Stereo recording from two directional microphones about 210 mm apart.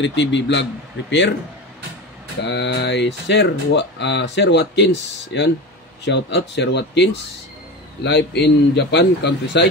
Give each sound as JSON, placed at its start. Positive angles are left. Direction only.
{"t": 0.0, "sound": "speech", "side_deg": 60}
{"t": 2.4, "sound": "a man's voice", "side_deg": 55}